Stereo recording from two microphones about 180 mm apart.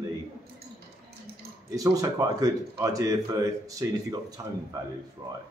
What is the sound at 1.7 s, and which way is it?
Speech, 20° right (ahead or behind).